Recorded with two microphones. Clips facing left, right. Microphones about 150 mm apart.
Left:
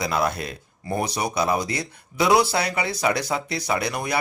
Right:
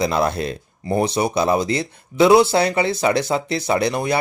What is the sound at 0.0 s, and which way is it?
Speech, 25° right (ahead or behind).